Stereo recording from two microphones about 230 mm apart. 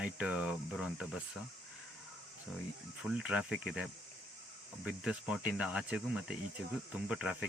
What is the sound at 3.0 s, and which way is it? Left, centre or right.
Speech, centre.